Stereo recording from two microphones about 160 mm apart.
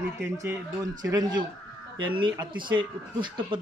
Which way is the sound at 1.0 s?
25° right (ahead or behind).